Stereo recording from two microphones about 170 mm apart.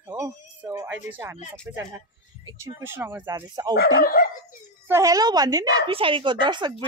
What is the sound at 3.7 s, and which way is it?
Speech, 60° left (ahead or behind).